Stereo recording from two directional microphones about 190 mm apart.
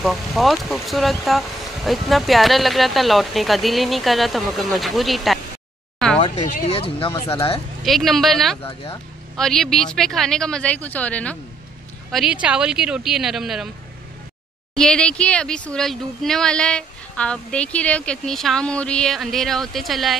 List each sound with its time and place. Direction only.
0.0 s speech: centre (ahead or behind)
6.1 s a sound: 25° left (ahead or behind)
6.4 s speech: 35° left (ahead or behind)
7.8 s speech: centre (ahead or behind)
14.8 s speech: 5° left (ahead or behind)